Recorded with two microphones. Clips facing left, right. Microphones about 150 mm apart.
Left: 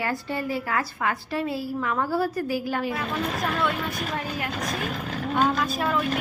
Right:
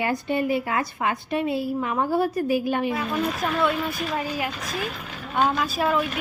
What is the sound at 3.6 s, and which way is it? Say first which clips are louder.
Speech: right 3 dB; 5° right (ahead or behind).